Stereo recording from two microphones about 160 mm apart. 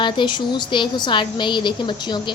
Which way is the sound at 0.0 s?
30° left (ahead or behind).